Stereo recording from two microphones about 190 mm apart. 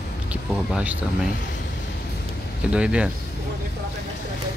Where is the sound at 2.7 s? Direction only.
5° right (ahead or behind).